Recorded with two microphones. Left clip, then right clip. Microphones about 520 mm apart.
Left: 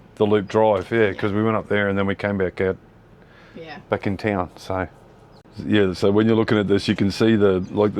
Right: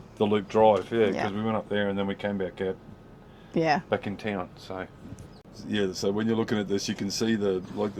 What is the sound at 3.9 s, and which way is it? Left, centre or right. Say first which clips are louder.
Speech: left 7 dB; left.